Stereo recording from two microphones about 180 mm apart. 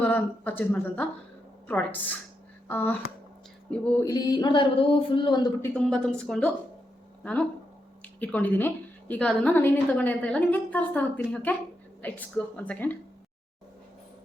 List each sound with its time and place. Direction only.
0.0 s a woman's voice: 10° left (ahead or behind)
4.0 s speech: 20° left (ahead or behind)
5.6 s a woman's voice: 5° left (ahead or behind)
8.0 s a woman's voice: 10° left (ahead or behind)